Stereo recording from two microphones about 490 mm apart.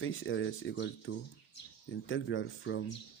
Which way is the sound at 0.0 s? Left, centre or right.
Left.